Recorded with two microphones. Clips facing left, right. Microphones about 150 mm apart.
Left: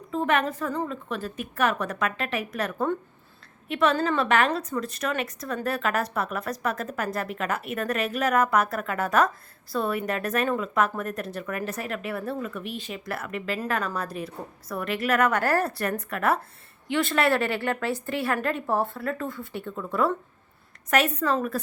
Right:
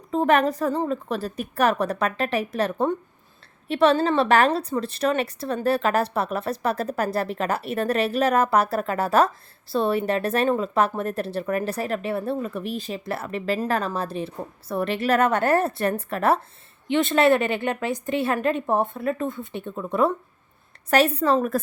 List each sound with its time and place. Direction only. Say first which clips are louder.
0.1 s a woman's voice: right 5 dB; 35° right (ahead or behind); by 20.1 s 20° right (ahead or behind)
20.9 s speech: right 4 dB; 30° right (ahead or behind)